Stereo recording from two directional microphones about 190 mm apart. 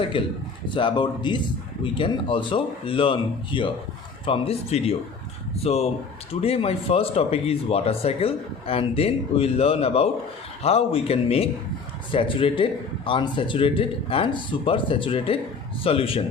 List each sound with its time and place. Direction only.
0.1 s speech: 25° left (ahead or behind)